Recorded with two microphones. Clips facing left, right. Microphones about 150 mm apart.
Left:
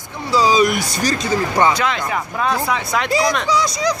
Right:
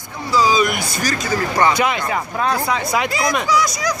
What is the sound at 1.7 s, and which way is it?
Speech, 10° right (ahead or behind).